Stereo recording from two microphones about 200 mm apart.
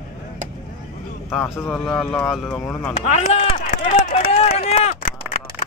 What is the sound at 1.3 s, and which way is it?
Speech, 5° left (ahead or behind).